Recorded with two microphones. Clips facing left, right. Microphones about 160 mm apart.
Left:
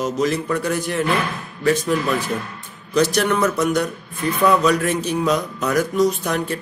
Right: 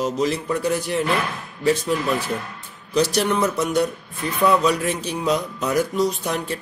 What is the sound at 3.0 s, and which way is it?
Speech, 30° right (ahead or behind).